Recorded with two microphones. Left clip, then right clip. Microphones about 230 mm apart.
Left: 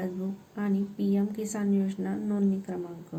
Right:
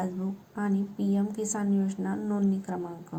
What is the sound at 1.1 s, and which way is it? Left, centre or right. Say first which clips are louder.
A woman's voice: right 1 dB; centre.